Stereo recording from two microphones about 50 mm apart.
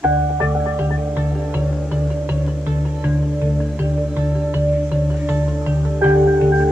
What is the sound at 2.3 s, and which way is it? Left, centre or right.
Music, right.